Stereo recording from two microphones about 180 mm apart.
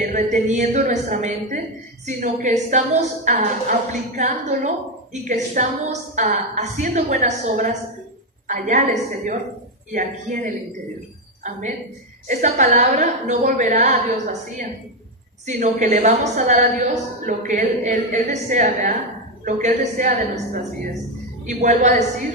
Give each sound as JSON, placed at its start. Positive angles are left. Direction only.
{"t": 0.1, "sound": "a woman's voice", "side_deg": -45}
{"t": 12.3, "sound": "a woman's voice", "side_deg": -45}
{"t": 15.4, "sound": "a woman's voice", "side_deg": -45}